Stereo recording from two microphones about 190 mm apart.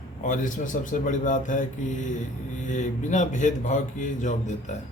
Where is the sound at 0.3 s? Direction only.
40° left (ahead or behind).